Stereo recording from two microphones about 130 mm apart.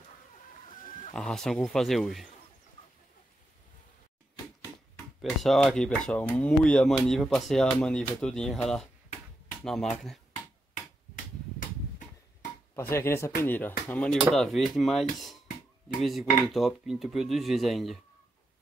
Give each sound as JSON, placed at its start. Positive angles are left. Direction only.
{"t": 1.1, "sound": "speech", "side_deg": 5}
{"t": 5.4, "sound": "speech", "side_deg": 0}
{"t": 12.7, "sound": "speech", "side_deg": 20}